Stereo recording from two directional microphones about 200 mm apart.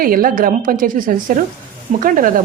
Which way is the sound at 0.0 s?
45° right (ahead or behind).